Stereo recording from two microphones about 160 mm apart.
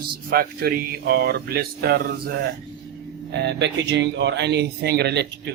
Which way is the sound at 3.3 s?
90° right.